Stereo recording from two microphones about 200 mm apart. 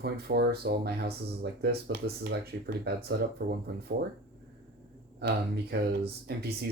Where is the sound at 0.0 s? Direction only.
50° right (ahead or behind).